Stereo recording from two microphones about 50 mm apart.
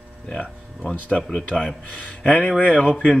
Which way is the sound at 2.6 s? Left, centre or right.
Left.